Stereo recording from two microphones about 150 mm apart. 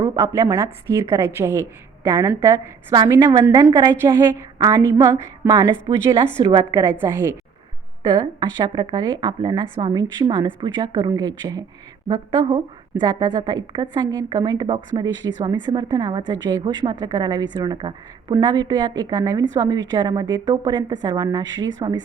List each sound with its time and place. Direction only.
0.0 s a woman's voice: 20° right (ahead or behind)
6.7 s a woman's voice: 15° right (ahead or behind)
8.0 s a woman's voice: 25° right (ahead or behind)